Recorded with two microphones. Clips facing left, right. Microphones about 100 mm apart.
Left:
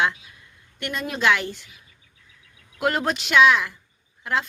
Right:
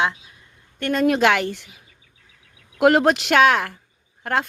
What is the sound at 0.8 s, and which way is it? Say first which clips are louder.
Speech: right 7 dB; 50° right (ahead or behind).